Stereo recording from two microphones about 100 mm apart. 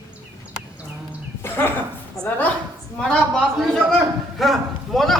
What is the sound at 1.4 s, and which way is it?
Speech, 25° left (ahead or behind).